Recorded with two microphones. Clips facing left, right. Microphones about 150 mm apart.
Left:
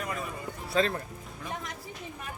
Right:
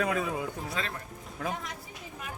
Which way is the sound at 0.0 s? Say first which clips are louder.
Right 6 dB; 90° right.